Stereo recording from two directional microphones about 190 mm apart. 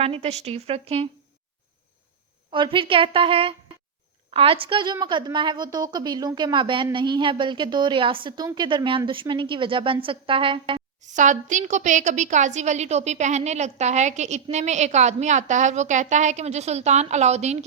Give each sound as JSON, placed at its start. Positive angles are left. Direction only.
{"t": 0.0, "sound": "a woman's voice", "side_deg": -35}
{"t": 2.5, "sound": "a woman's voice", "side_deg": -25}
{"t": 11.0, "sound": "a woman's voice", "side_deg": -40}